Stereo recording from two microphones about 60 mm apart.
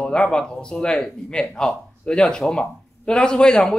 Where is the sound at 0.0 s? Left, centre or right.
Centre.